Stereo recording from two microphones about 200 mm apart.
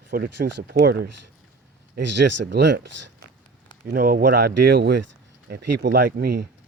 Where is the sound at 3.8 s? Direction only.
45° right (ahead or behind).